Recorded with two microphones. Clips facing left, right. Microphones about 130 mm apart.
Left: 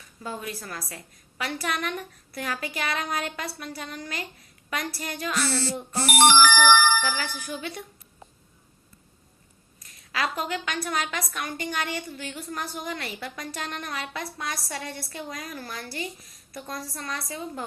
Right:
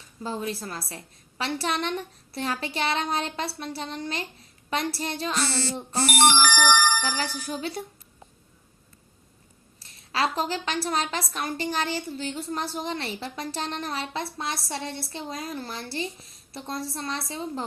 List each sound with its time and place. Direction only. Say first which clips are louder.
0.0 s a woman's voice: right 4 dB; 30° right (ahead or behind)
6.2 s speech: left 3 dB; 90° left
7.0 s speech: right 1 dB; 30° right (ahead or behind)
9.8 s a woman's voice: right 3 dB; 30° right (ahead or behind)